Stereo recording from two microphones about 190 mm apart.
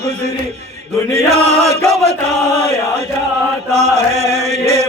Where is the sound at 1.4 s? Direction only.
35° right (ahead or behind).